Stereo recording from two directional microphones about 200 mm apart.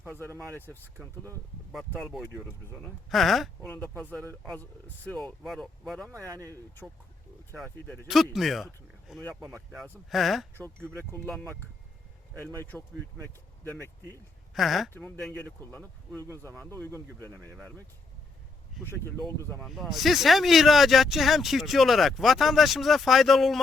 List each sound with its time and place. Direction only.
0.3 s speech: 15° right (ahead or behind)
0.5 s speech: 10° left (ahead or behind)
1.0 s speech: 10° right (ahead or behind)
2.2 s speech: 10° left (ahead or behind)
3.8 s speech: 10° left (ahead or behind)
6.1 s speech: 15° right (ahead or behind)
7.6 s speech: centre (ahead or behind)
12.5 s speech: 10° left (ahead or behind)
14.5 s speech: centre (ahead or behind)
17.2 s speech: 10° left (ahead or behind)
18.9 s speech: 10° left (ahead or behind)
19.5 s speech: centre (ahead or behind)